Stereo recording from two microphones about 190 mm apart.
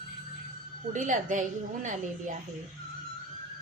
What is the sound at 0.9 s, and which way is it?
A woman's voice, 40° right (ahead or behind).